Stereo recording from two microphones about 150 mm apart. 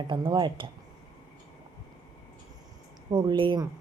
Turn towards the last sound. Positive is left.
turn(degrees=-30)  # may be behind; listen again after turning